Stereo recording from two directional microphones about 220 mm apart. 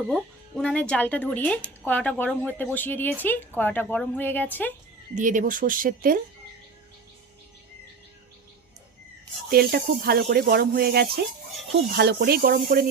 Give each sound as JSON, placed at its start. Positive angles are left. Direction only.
{"t": 0.1, "sound": "speech", "side_deg": 5}
{"t": 5.1, "sound": "speech", "side_deg": -35}
{"t": 9.5, "sound": "speech", "side_deg": -45}